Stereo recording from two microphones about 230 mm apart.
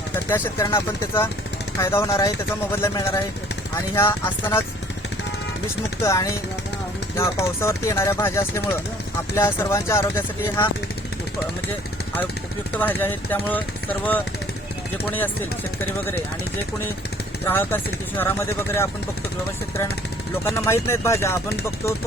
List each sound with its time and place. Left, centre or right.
0.3 s speech: centre
6.0 s speech: centre
12.7 s speech: centre
17.4 s speech: centre
20.4 s speech: centre